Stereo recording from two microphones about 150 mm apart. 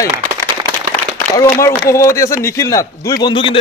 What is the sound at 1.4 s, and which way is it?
A man's voice, 20° left (ahead or behind).